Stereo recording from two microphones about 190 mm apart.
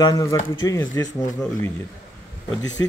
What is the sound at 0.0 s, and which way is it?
Speech, 20° left (ahead or behind).